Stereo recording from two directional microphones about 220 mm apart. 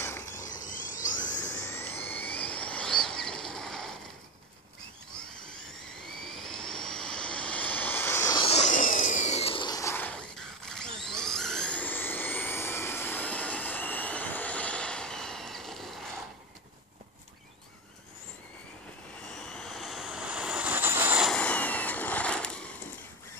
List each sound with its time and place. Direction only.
0.0 s mechanisms: 10° left (ahead or behind)
0.4 s mechanisms: 35° left (ahead or behind)
1.6 s a sound: 10° left (ahead or behind)
6.0 s vehicle: centre (ahead or behind)
19.3 s vehicle: centre (ahead or behind)